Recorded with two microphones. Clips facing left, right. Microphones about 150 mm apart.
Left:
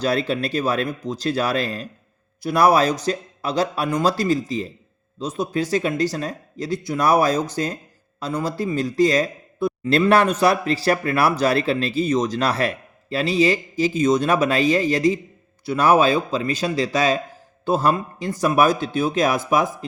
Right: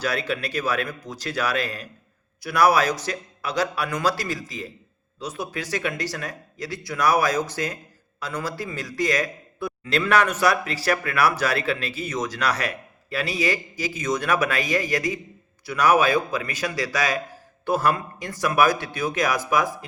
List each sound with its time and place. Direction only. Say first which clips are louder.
0.0 s a man's voice: left 5 dB; 25° left (ahead or behind)